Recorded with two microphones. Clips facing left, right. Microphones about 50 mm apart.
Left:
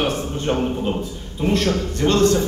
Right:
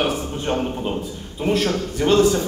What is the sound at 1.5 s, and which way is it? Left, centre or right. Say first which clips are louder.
Speech: even; centre.